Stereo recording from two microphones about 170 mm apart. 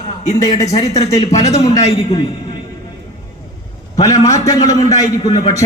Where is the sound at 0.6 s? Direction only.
40° left (ahead or behind).